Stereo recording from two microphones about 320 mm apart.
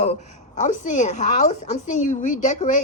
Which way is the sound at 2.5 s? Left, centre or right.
Left.